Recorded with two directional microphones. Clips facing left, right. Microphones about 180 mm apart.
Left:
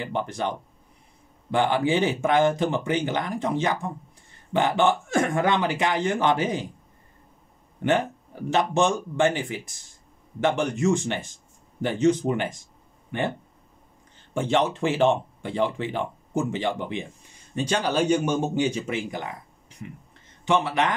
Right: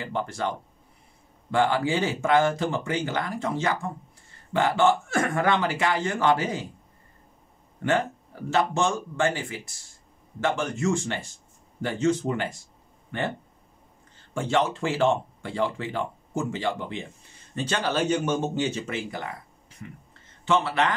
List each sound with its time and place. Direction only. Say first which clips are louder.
0.0 s speech: left 1 dB; 20° left (ahead or behind)
7.8 s speech: left 2 dB; 20° left (ahead or behind)
14.3 s speech: left 2 dB; 20° left (ahead or behind)
20.4 s speech: left 1 dB; 15° left (ahead or behind)